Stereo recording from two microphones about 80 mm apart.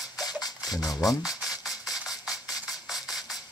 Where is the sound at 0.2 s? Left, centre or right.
Left.